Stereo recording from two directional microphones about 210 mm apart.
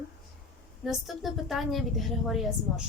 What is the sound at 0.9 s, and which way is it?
A woman's voice, centre (ahead or behind).